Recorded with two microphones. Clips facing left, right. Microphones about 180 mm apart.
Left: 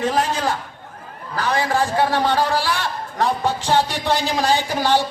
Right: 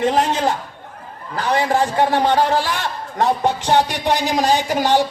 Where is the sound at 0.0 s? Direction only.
25° right (ahead or behind).